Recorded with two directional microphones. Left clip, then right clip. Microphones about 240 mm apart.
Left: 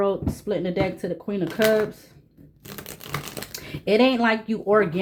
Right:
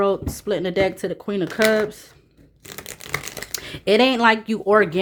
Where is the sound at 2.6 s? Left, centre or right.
Centre.